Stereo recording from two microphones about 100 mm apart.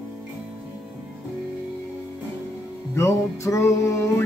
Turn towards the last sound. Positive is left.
turn(degrees=30)  # may be behind; listen again after turning